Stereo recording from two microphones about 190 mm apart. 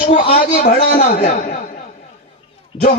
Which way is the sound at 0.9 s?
50° left (ahead or behind).